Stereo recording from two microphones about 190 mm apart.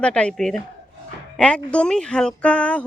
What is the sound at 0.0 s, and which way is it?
Speech, 5° left (ahead or behind).